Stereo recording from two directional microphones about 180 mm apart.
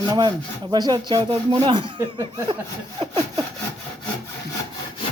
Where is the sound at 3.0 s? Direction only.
30° right (ahead or behind).